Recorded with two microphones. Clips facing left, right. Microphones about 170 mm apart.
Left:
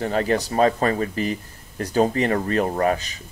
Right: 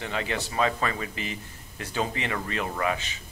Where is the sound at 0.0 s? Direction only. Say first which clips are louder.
Left 9 dB; 40° left (ahead or behind).